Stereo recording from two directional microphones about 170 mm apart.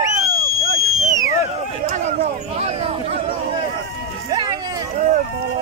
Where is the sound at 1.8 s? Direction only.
45° right (ahead or behind).